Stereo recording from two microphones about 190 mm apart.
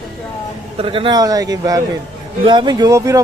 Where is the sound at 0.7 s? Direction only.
25° right (ahead or behind).